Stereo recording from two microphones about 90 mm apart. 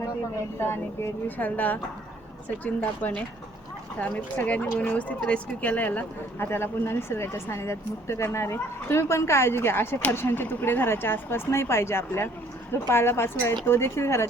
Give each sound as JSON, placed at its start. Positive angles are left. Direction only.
{"t": 1.4, "sound": "speech", "side_deg": 20}